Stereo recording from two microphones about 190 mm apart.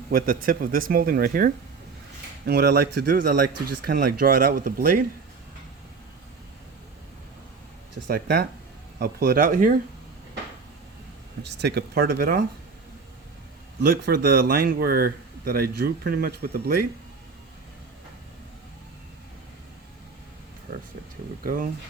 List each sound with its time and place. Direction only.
0.1 s speech: 50° right (ahead or behind)
8.0 s speech: 55° right (ahead or behind)
11.4 s speech: 65° right (ahead or behind)
13.8 s speech: 55° right (ahead or behind)
21.4 s speech: 45° right (ahead or behind)